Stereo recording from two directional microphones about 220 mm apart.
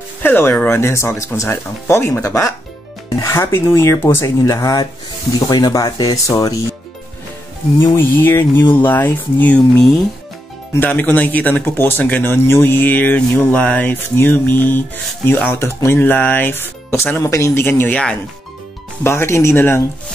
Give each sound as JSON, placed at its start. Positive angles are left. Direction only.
{"t": 0.2, "sound": "speech", "side_deg": 10}
{"t": 7.8, "sound": "speech", "side_deg": 10}